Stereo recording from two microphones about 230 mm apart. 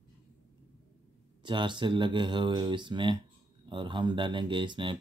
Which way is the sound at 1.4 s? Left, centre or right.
Right.